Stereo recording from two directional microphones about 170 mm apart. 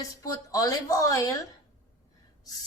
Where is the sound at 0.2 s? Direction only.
20° left (ahead or behind).